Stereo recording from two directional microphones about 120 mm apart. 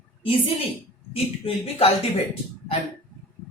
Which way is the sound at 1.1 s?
55° left (ahead or behind).